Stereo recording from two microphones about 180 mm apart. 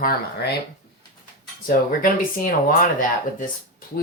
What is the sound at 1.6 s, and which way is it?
Speech, 50° left (ahead or behind).